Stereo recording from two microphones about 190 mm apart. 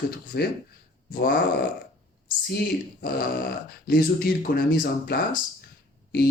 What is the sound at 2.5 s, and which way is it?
Speech, 55° left (ahead or behind).